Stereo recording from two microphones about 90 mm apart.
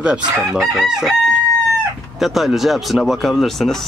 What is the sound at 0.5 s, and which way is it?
Speech, centre (ahead or behind).